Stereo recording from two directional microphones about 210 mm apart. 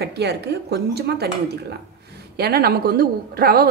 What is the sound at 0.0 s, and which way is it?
A woman's voice, 50° right (ahead or behind).